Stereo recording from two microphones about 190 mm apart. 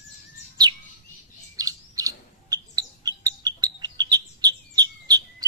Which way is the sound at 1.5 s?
20° right (ahead or behind).